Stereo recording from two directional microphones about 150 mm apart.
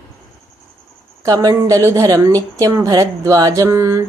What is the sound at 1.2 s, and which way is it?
A woman's voice, 25° right (ahead or behind).